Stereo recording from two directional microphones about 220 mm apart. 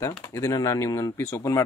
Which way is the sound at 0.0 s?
10° left (ahead or behind).